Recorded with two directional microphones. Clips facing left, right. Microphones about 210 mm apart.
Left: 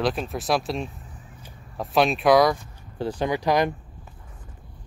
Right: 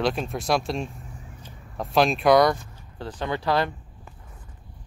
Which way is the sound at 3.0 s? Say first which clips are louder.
Left 4 dB; 10° left (ahead or behind).